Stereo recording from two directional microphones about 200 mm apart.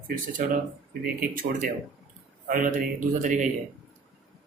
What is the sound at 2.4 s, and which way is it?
Speech, 40° right (ahead or behind).